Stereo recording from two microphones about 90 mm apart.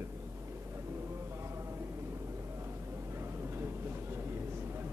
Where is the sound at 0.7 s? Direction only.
30° right (ahead or behind).